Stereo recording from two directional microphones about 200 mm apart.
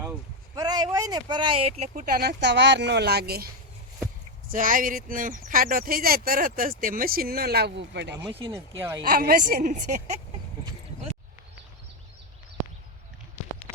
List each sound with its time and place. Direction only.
0.5 s speech: 20° right (ahead or behind)
2.1 s speech: 55° right (ahead or behind)
4.5 s speech: 40° right (ahead or behind); by 8.2 s 60° right (ahead or behind)
8.2 s speech: 25° right (ahead or behind)
8.8 s speech: 15° right (ahead or behind)
9.0 s speech: 45° right (ahead or behind)